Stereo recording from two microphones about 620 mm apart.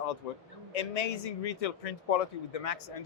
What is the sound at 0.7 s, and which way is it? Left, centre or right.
A man's voice, left.